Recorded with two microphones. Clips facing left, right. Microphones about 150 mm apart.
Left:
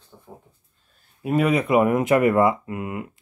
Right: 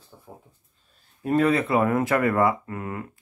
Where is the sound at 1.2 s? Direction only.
10° left (ahead or behind).